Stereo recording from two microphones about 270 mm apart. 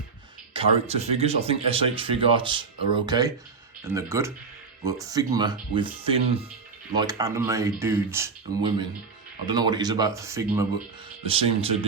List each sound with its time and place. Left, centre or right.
0.5 s speech: right
11.3 s speech: right